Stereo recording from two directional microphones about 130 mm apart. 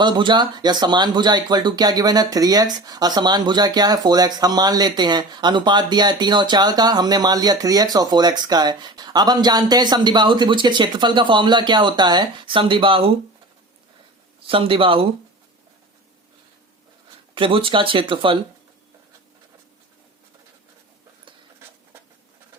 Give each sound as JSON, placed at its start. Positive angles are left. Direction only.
{"t": 0.0, "sound": "speech", "side_deg": -35}
{"t": 14.4, "sound": "speech", "side_deg": -45}
{"t": 17.3, "sound": "speech", "side_deg": -40}